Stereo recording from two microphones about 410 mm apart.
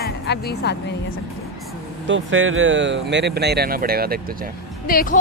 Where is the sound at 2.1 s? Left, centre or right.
Right.